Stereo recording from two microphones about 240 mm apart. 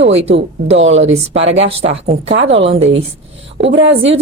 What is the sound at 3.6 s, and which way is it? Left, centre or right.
Speech, right.